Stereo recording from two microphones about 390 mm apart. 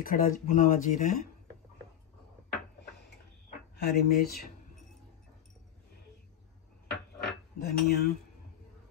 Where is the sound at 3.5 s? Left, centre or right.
Left.